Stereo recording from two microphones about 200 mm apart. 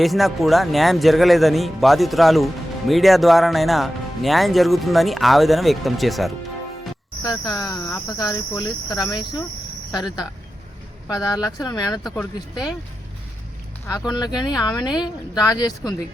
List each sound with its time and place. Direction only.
0.0 s speech: centre (ahead or behind)
7.2 s speech: 20° left (ahead or behind)
12.0 s speech: 5° left (ahead or behind)
14.1 s speech: 20° left (ahead or behind)